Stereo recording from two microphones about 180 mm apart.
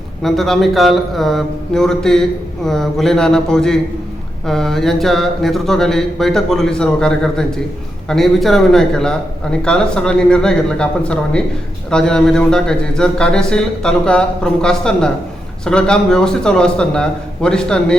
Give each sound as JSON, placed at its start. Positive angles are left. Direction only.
{"t": 0.2, "sound": "a man's voice", "side_deg": 0}